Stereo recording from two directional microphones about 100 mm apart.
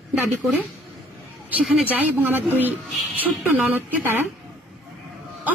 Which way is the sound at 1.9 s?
15° right (ahead or behind).